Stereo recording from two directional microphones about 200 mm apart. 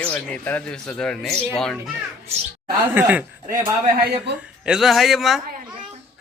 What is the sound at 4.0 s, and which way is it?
Speech, 50° right (ahead or behind).